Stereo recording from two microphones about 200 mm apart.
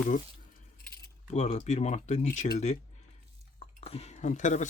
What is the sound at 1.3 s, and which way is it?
Speech, 30° left (ahead or behind).